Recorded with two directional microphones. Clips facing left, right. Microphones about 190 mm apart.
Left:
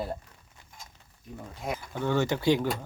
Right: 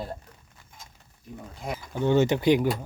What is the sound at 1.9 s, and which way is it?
Speech, 20° right (ahead or behind).